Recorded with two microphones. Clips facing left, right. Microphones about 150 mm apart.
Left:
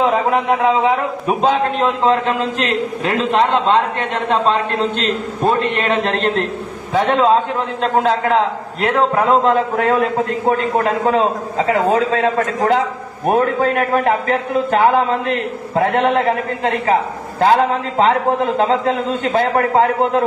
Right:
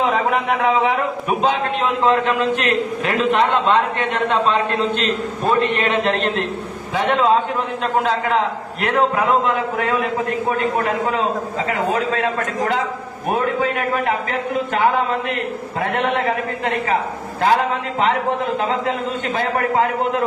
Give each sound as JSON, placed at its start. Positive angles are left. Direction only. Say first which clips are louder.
{"t": 0.3, "sound": "a man's voice", "louder": "left 3 dB", "side_deg": 30}
{"t": 10.8, "sound": "a man's voice", "louder": "left 4 dB", "side_deg": 35}